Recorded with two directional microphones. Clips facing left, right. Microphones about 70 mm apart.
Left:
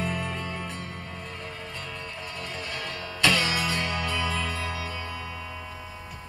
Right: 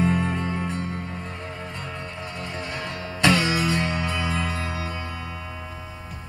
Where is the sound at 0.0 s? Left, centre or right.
Right.